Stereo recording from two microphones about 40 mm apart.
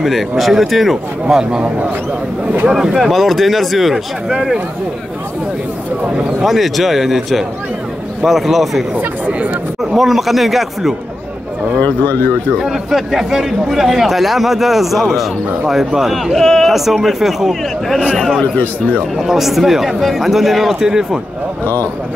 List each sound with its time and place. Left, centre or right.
0.0 s speech: centre
1.2 s speech: centre
2.7 s speech: centre
6.4 s speech: centre
8.9 s speech: right
9.9 s speech: centre
11.8 s speech: left
12.5 s speech: centre
16.3 s speech: centre
16.6 s speech: centre
19.1 s speech: centre
20.8 s speech: centre